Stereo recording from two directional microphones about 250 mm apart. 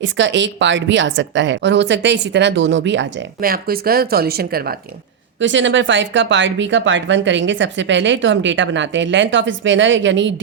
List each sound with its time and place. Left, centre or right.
0.0 s speech: right
5.4 s speech: right